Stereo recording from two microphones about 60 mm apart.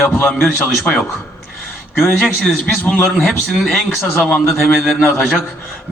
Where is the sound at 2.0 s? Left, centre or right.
Centre.